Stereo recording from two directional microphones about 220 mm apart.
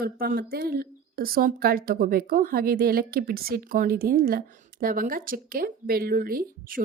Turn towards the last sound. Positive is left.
turn(degrees=-40)  # may be behind; listen again after turning